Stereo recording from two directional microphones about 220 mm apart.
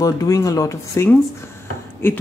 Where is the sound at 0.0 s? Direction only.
15° left (ahead or behind).